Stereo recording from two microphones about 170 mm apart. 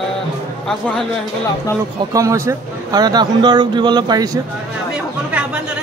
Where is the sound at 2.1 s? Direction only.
15° right (ahead or behind).